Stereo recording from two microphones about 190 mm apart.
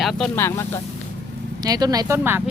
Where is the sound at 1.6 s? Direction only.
20° right (ahead or behind).